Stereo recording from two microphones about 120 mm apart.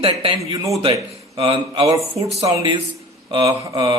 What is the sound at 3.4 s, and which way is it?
Speech, 25° right (ahead or behind).